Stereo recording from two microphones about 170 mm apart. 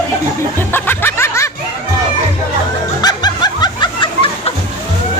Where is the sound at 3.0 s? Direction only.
25° left (ahead or behind).